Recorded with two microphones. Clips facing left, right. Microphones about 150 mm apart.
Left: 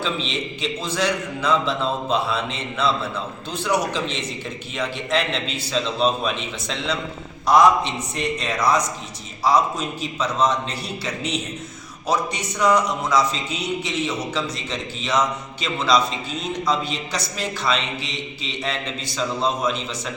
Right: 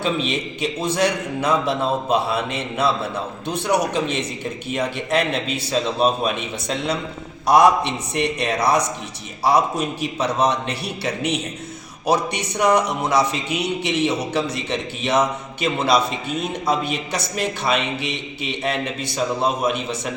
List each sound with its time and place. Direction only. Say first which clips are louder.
0.0 s a man's voice: right 4 dB; 55° right (ahead or behind)